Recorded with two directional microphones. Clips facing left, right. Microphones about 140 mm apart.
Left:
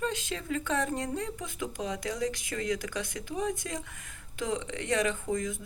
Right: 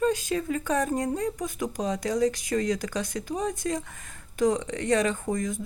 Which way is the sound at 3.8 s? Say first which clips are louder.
Right 3 dB; 50° right (ahead or behind).